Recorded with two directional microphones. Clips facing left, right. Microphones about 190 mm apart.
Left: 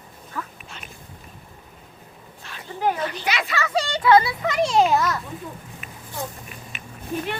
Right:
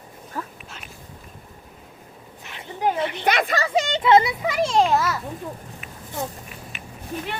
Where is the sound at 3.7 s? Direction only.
20° right (ahead or behind).